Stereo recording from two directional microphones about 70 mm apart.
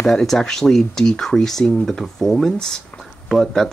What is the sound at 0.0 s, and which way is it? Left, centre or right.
Speech, centre.